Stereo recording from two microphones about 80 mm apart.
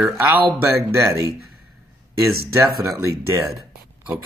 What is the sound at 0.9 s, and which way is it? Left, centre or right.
Speech, right.